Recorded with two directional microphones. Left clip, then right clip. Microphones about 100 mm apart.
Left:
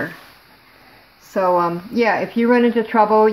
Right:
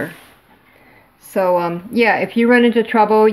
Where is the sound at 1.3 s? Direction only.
25° right (ahead or behind).